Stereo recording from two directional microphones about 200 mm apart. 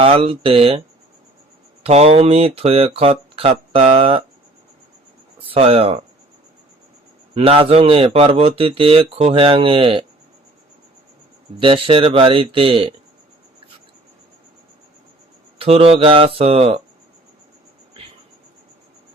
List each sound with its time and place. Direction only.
0.0 s speech: 30° right (ahead or behind)
1.8 s speech: 30° right (ahead or behind)
5.5 s speech: 30° right (ahead or behind)
7.3 s speech: 25° right (ahead or behind)
11.6 s speech: 25° right (ahead or behind)
15.5 s speech: 30° right (ahead or behind)